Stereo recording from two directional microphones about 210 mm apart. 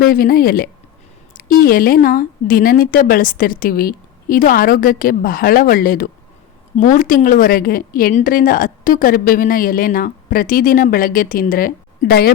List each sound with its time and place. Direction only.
0.0 s a woman's voice: 45° left (ahead or behind)